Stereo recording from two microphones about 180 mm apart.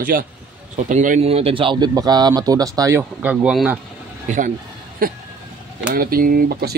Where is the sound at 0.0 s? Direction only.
50° right (ahead or behind); by 3.8 s 5° right (ahead or behind).